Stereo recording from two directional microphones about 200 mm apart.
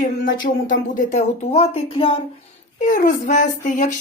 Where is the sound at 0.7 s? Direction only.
40° left (ahead or behind).